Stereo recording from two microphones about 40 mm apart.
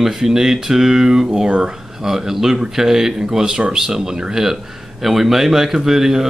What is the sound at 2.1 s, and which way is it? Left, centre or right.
Speech, centre.